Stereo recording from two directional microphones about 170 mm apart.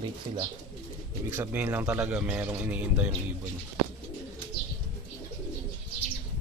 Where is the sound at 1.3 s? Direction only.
10° right (ahead or behind).